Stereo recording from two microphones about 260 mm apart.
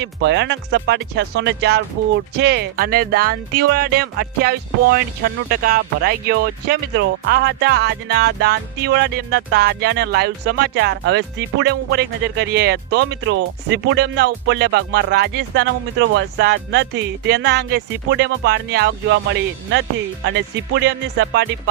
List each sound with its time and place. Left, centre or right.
0.0 s speech: right